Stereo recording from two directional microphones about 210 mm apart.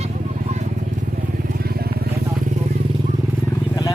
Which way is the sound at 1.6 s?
45° right (ahead or behind).